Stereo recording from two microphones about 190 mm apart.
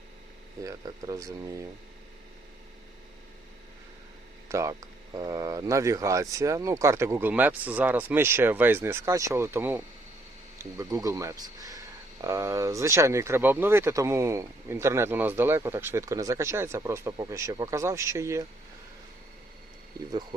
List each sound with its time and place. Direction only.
0.6 s speech: 15° right (ahead or behind)
4.4 s speech: 15° right (ahead or behind)